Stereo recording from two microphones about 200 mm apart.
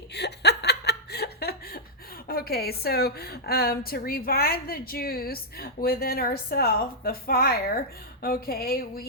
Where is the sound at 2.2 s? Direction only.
50° left (ahead or behind).